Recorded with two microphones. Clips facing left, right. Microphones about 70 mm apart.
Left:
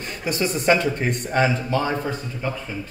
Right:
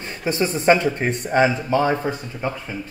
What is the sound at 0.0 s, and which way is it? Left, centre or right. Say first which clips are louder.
Speech: right 2 dB; right.